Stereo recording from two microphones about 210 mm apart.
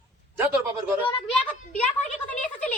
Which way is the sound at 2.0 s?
35° left (ahead or behind).